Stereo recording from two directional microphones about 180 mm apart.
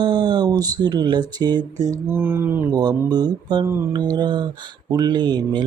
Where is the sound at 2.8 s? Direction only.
25° right (ahead or behind).